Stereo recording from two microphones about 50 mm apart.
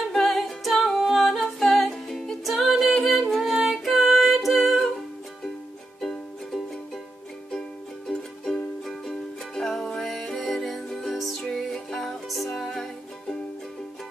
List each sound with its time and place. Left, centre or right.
0.1 s music: centre
5.9 s music: centre
8.1 s music: centre
11.9 s music: centre